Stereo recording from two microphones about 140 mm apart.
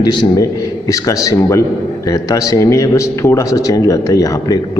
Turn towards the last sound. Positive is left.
turn(degrees=25)  # may be behind; listen again after turning